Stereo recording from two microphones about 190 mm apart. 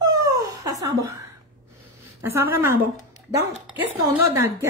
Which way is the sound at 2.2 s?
15° right (ahead or behind).